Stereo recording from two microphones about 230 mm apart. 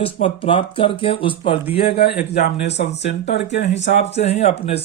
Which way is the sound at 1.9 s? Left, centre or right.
Left.